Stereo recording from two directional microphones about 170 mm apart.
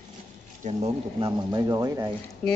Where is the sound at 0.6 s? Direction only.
40° right (ahead or behind).